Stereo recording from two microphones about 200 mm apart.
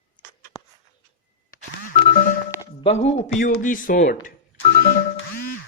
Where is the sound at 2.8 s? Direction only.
30° left (ahead or behind).